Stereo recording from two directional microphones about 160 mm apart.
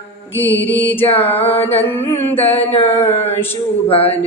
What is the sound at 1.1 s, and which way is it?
Mantra, 35° left (ahead or behind).